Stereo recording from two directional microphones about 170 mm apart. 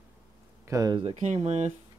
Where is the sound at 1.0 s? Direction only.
40° right (ahead or behind).